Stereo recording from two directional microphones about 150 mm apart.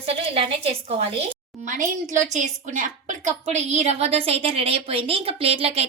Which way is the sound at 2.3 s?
55° right (ahead or behind).